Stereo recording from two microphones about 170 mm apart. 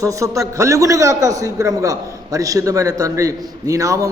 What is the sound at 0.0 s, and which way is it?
A man's voice, 20° right (ahead or behind).